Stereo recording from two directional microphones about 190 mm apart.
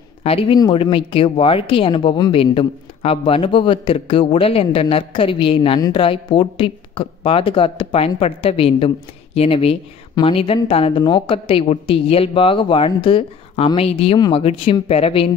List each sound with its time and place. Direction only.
0.2 s a woman's voice: 30° left (ahead or behind)